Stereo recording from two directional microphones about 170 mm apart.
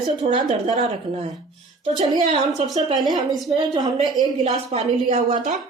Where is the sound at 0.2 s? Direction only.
30° right (ahead or behind).